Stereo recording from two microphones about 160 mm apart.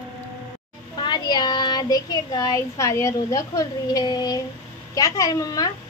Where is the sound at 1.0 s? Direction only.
25° left (ahead or behind).